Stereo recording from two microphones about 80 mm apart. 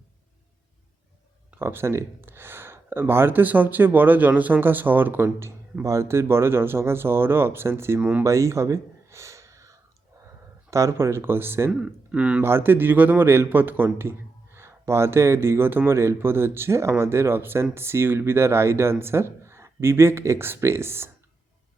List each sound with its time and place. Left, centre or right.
1.5 s a man's voice: right
8.2 s a sound: right
10.7 s speech: right
11.8 s speech: centre
12.4 s a man's voice: right